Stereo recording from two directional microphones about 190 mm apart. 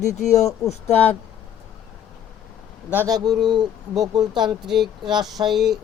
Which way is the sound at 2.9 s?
15° right (ahead or behind).